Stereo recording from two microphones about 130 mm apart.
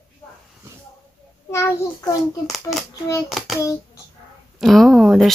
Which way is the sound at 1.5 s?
20° left (ahead or behind).